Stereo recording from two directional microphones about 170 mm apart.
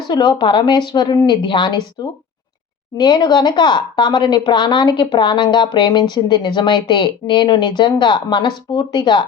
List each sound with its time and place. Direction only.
0.1 s a woman's voice: 25° left (ahead or behind)